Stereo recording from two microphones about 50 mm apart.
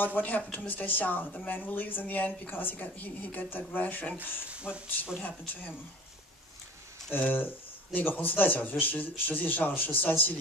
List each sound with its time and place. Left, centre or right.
0.0 s speech: left
7.1 s speech: left